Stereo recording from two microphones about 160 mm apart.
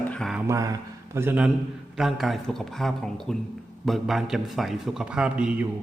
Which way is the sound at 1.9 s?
Centre (ahead or behind).